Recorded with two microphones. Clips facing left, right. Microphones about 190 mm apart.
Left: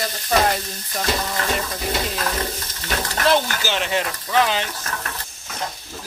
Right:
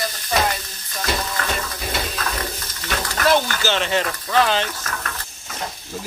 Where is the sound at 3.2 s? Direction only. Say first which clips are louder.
Right 1 dB; 20° left (ahead or behind).